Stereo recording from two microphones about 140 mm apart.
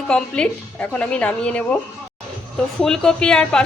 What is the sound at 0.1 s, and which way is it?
A woman's voice, 5° left (ahead or behind).